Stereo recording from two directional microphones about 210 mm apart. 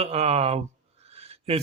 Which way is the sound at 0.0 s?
30° right (ahead or behind).